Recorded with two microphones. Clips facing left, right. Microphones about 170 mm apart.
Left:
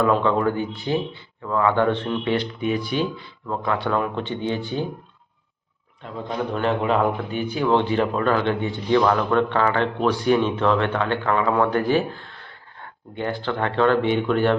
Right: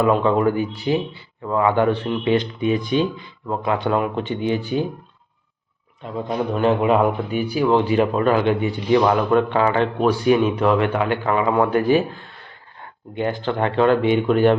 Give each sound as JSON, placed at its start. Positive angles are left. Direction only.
{"t": 0.1, "sound": "speech", "side_deg": -10}
{"t": 6.2, "sound": "speech", "side_deg": -15}